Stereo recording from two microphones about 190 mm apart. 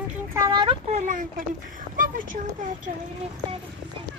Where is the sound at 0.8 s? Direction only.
40° right (ahead or behind).